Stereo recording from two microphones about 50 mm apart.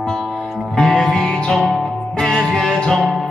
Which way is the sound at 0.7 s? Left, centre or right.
Centre.